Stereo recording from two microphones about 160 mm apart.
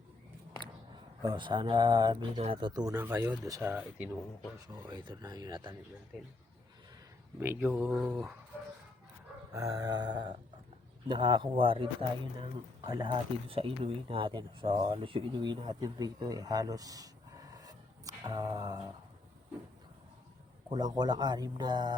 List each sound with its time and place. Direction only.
1.3 s speech: 30° right (ahead or behind)
2.9 s speech: 15° right (ahead or behind)
3.6 s speech: 10° right (ahead or behind)
4.9 s speech: 25° right (ahead or behind)
7.3 s speech: 15° right (ahead or behind)
9.5 s speech: 20° right (ahead or behind)
20.7 s speech: 25° right (ahead or behind)